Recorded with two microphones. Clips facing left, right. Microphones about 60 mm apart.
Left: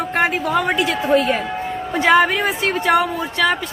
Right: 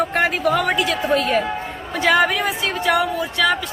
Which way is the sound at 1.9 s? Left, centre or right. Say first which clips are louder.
Left 2 dB; left.